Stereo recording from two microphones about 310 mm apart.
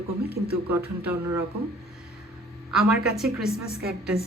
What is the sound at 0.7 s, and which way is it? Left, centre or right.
Speech, centre.